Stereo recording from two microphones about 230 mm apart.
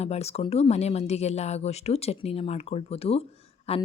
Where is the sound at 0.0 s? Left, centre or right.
Left.